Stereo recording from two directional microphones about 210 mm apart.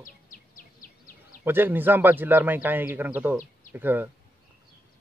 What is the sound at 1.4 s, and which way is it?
Speech, 10° right (ahead or behind).